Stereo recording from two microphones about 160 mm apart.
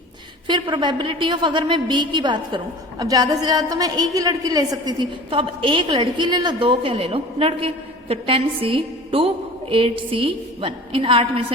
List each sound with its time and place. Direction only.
0.4 s a woman's voice: 30° right (ahead or behind)